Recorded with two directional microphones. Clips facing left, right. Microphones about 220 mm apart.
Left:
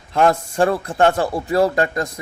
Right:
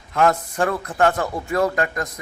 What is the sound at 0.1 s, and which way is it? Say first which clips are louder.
A man's voice: left 2 dB; 30° left (ahead or behind).